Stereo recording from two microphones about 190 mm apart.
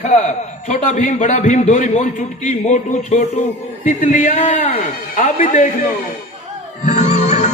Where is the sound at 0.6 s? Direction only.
40° left (ahead or behind).